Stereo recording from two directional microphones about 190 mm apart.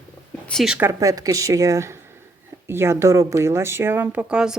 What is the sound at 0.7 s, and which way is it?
Speech, 15° right (ahead or behind).